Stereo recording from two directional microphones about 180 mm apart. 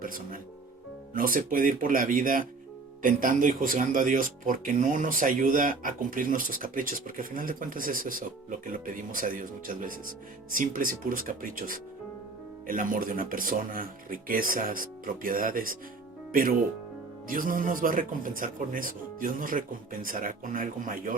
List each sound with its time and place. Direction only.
0.0 s speech: 50° right (ahead or behind)